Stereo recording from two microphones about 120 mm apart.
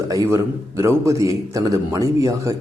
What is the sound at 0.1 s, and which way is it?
Speech, 25° right (ahead or behind).